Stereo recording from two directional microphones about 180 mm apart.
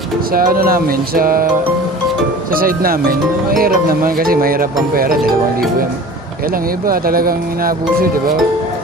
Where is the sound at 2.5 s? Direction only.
55° right (ahead or behind).